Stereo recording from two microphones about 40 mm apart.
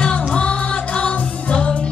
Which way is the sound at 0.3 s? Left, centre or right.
Left.